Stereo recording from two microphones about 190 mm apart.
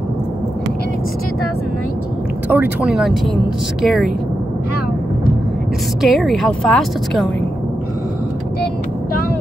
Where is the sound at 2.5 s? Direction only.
5° right (ahead or behind).